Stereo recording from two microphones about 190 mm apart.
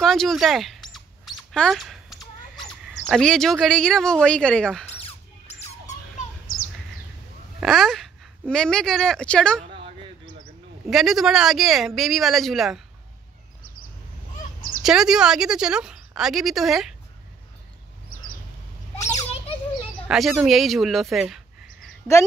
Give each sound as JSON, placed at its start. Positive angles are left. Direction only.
{"t": 0.0, "sound": "speech", "side_deg": 0}
{"t": 5.0, "sound": "a sound", "side_deg": 35}
{"t": 6.4, "sound": "bird", "side_deg": 45}
{"t": 7.6, "sound": "speech", "side_deg": 0}
{"t": 10.9, "sound": "speech", "side_deg": 0}
{"t": 14.8, "sound": "speech", "side_deg": -5}
{"t": 20.1, "sound": "speech", "side_deg": 0}